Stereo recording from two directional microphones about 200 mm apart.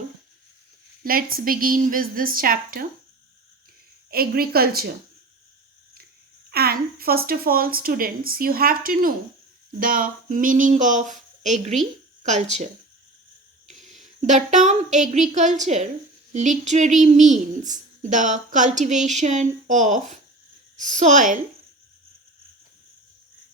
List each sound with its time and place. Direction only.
1.0 s speech: 45° right (ahead or behind)
4.1 s speech: 50° right (ahead or behind)
6.5 s a child's voice: 50° right (ahead or behind)
14.2 s a child's voice: 35° right (ahead or behind)